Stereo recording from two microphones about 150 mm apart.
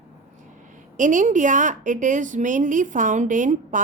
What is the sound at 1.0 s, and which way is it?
A woman's voice, 60° right (ahead or behind).